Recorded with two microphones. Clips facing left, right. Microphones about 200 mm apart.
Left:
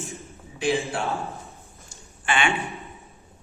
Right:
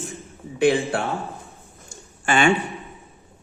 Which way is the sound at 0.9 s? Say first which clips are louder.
Right 3 dB; 60° right (ahead or behind).